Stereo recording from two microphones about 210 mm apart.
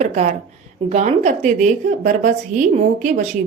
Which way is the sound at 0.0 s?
35° right (ahead or behind).